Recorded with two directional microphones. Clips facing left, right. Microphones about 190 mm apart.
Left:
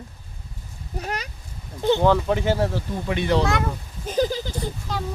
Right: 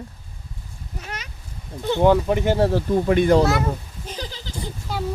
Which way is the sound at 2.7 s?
45° right (ahead or behind).